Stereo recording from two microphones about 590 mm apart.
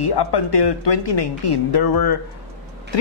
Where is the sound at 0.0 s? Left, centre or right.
Left.